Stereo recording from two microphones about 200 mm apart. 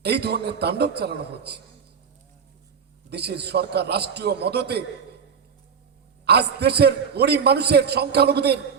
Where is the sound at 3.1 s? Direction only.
55° right (ahead or behind).